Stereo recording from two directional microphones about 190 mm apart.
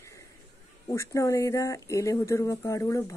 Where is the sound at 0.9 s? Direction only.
15° left (ahead or behind).